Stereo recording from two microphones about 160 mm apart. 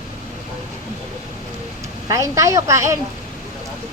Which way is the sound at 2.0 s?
20° right (ahead or behind).